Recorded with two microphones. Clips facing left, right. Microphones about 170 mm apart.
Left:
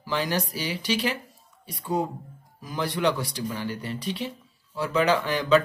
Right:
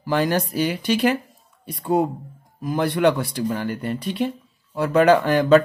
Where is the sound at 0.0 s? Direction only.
50° right (ahead or behind).